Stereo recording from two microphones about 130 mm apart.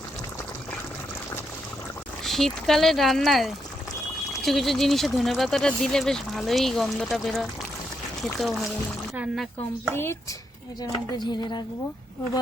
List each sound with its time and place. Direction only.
2.2 s speech: centre (ahead or behind)
9.9 s speech: 20° left (ahead or behind)